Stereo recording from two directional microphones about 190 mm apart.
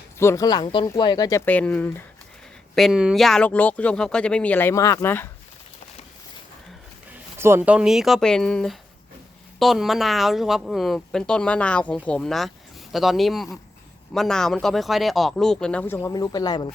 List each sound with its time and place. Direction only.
0.2 s speech: 15° left (ahead or behind)
7.3 s speech: 15° right (ahead or behind); by 16.7 s 20° left (ahead or behind)